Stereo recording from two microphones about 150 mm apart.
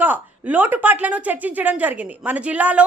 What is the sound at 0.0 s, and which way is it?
A woman's voice, 10° right (ahead or behind).